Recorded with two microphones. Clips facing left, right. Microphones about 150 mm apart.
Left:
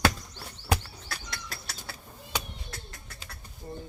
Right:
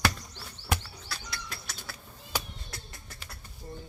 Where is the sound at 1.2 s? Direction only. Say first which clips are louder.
Left 1 dB; 45° left (ahead or behind).